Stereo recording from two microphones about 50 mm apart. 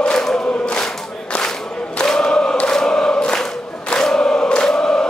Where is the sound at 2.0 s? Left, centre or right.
Centre.